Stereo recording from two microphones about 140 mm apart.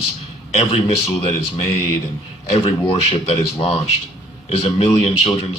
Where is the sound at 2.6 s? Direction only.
40° left (ahead or behind).